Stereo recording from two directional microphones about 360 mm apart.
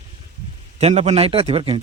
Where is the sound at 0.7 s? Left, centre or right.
Centre.